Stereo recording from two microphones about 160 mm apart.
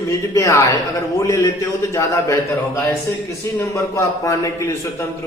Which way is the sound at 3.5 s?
20° left (ahead or behind).